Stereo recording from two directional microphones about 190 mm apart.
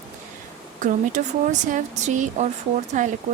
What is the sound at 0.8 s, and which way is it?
Speech, 40° right (ahead or behind).